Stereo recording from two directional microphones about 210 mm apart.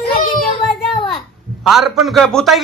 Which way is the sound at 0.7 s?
Centre (ahead or behind).